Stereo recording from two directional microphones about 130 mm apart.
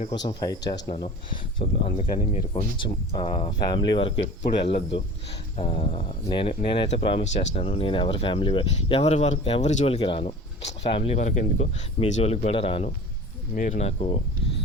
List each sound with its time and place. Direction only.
0.1 s speech: 35° left (ahead or behind)
1.5 s speech: 50° left (ahead or behind)
13.5 s speech: 90° left
13.7 s speech: 50° left (ahead or behind)